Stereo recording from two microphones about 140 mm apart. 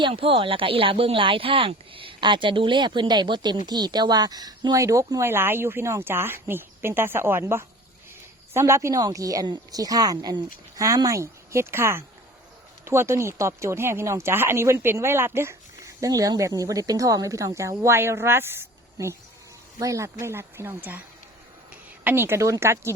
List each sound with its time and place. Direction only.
0.0 s speech: 40° right (ahead or behind); by 21.0 s 15° right (ahead or behind)
22.0 s speech: 15° right (ahead or behind)